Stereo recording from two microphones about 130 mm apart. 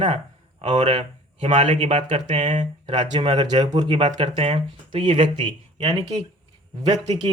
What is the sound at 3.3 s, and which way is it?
Speech, 50° right (ahead or behind).